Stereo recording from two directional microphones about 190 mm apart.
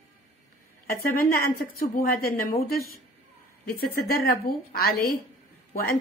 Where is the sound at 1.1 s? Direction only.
50° left (ahead or behind).